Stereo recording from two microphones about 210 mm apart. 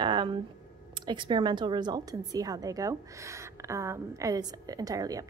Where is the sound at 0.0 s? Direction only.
20° right (ahead or behind).